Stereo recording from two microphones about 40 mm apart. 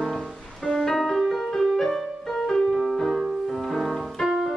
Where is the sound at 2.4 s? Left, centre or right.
Centre.